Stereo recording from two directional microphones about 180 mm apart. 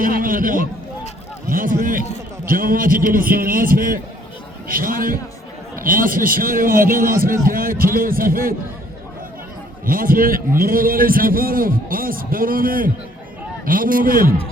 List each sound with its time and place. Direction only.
0.0 s a man's voice: 50° right (ahead or behind)
9.8 s a man's voice: 50° right (ahead or behind)